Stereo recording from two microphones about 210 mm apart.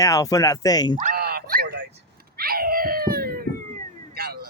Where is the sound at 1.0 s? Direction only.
45° right (ahead or behind).